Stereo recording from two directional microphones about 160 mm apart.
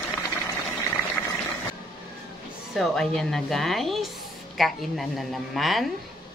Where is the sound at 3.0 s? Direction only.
5° left (ahead or behind).